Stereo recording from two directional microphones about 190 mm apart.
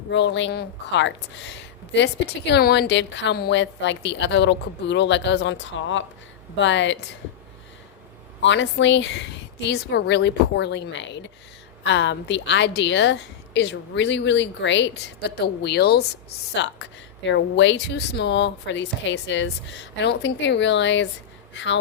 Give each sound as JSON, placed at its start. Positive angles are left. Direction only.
{"t": 0.1, "sound": "speech", "side_deg": 70}
{"t": 8.4, "sound": "speech", "side_deg": 75}
{"t": 16.6, "sound": "speech", "side_deg": 70}